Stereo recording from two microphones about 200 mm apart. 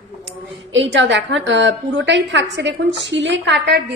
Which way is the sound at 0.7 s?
65° right (ahead or behind).